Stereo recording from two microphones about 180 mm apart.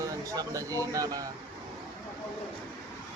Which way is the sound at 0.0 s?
20° right (ahead or behind).